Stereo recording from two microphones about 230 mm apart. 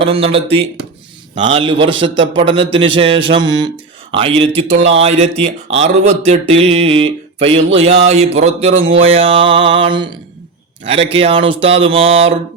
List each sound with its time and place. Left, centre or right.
0.0 s mantra: right